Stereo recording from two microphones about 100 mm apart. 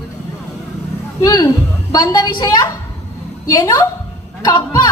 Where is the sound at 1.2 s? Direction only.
40° left (ahead or behind).